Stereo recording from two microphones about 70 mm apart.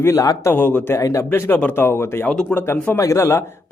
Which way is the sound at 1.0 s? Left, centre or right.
Left.